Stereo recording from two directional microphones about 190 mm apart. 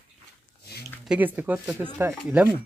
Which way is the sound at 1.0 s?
10° right (ahead or behind).